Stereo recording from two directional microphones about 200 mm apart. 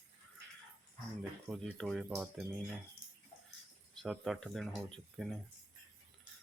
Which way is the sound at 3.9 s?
Centre (ahead or behind).